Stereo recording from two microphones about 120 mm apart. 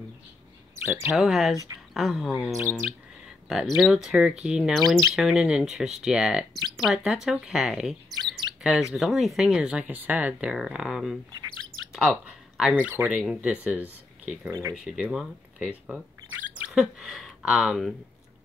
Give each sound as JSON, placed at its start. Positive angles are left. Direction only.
{"t": 0.8, "sound": "speech", "side_deg": -25}
{"t": 1.1, "sound": "speech", "side_deg": 0}
{"t": 2.5, "sound": "speech", "side_deg": -25}
{"t": 3.4, "sound": "speech", "side_deg": 0}
{"t": 8.1, "sound": "chirp", "side_deg": 0}
{"t": 8.9, "sound": "speech", "side_deg": 0}
{"t": 14.5, "sound": "speech", "side_deg": -25}
{"t": 14.9, "sound": "speech", "side_deg": -5}